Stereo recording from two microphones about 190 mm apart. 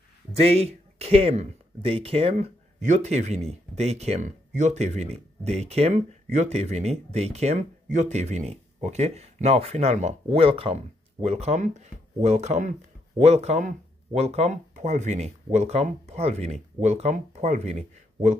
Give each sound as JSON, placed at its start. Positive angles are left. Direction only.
{"t": 0.4, "sound": "speech", "side_deg": -35}